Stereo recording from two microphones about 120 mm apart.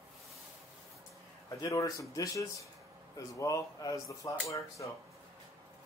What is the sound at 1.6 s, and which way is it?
Speech, 30° left (ahead or behind).